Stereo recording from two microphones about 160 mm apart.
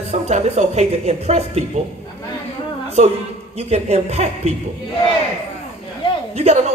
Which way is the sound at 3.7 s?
40° right (ahead or behind).